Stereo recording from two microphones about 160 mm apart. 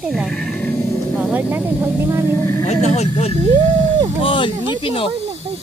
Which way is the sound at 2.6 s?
45° left (ahead or behind).